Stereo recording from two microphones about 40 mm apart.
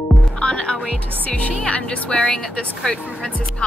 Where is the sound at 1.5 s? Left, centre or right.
Left.